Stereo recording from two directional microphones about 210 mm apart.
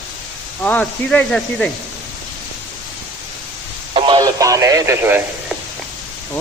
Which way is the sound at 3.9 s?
25° right (ahead or behind).